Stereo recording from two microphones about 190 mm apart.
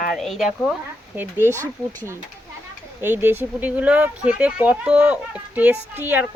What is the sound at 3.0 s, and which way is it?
Speech, 10° right (ahead or behind).